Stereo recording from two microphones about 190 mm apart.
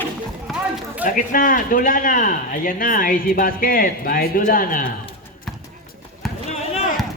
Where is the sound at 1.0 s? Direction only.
45° left (ahead or behind).